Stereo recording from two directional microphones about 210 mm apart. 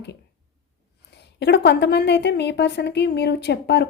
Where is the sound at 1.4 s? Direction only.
55° left (ahead or behind).